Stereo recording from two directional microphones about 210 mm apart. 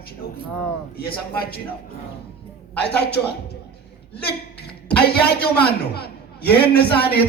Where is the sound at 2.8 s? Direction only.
50° left (ahead or behind).